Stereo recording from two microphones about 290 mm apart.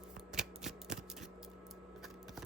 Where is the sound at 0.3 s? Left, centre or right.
Centre.